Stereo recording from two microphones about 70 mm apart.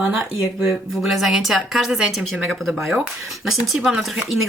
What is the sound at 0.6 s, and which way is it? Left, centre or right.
Speech, centre.